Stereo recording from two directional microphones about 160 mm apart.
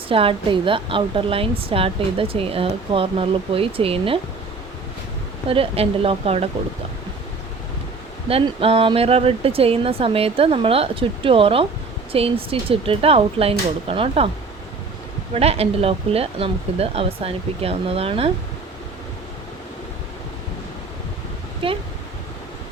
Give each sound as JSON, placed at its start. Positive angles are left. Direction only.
{"t": 0.1, "sound": "speech", "side_deg": -35}
{"t": 5.5, "sound": "speech", "side_deg": -35}
{"t": 8.3, "sound": "speech", "side_deg": -35}
{"t": 15.3, "sound": "speech", "side_deg": -40}
{"t": 21.6, "sound": "speech", "side_deg": -35}